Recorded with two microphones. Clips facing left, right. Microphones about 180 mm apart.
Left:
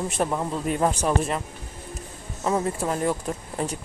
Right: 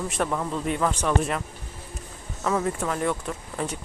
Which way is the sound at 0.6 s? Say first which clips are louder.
Left 3 dB; 40° left (ahead or behind).